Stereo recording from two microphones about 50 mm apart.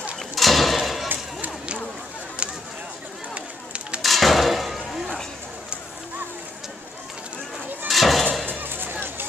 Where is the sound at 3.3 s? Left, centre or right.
Right.